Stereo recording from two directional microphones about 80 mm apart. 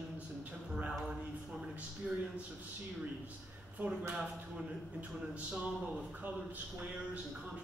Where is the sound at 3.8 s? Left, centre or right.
Right.